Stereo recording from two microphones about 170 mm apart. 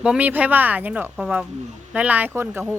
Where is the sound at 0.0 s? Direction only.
5° right (ahead or behind).